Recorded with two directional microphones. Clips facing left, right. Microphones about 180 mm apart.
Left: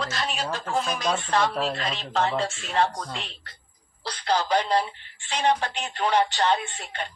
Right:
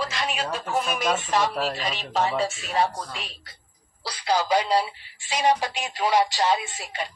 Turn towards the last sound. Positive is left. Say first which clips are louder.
# right 1 dB
turn(degrees=-10)  # may be behind; listen again after turning